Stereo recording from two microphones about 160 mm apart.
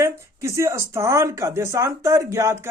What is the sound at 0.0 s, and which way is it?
Speech, 20° right (ahead or behind).